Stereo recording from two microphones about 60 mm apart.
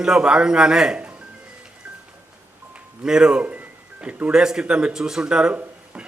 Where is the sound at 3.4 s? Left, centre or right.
Right.